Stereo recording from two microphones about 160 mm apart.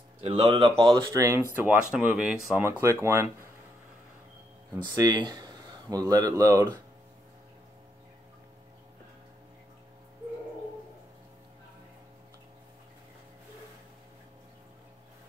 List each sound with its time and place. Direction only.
0.2 s speech: 35° right (ahead or behind)
1.1 s speech: 15° right (ahead or behind)
2.6 s speech: 15° right (ahead or behind)
4.8 s speech: 25° right (ahead or behind)